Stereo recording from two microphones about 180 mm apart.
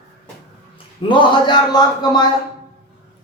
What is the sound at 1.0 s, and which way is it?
Speech, 25° left (ahead or behind).